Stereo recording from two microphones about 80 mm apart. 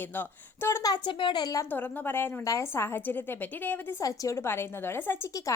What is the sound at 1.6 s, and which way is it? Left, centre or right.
A woman's voice, left.